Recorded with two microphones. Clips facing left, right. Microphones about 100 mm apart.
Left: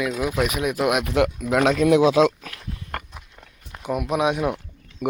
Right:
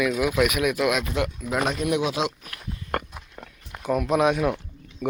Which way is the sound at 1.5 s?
90° left.